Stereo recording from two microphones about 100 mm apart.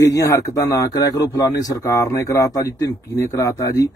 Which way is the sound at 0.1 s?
35° left (ahead or behind).